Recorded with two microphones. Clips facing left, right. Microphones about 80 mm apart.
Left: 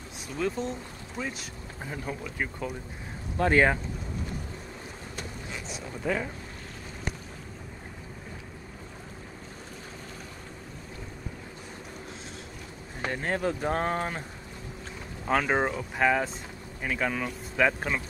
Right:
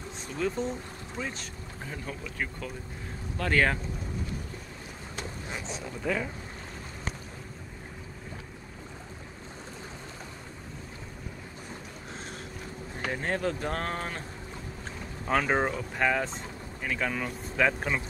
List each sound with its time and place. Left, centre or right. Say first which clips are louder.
0.4 s speech: even; centre
5.7 s speech: left 1 dB; centre
13.1 s speech: left 1 dB; centre
15.2 s speech: left 1 dB; centre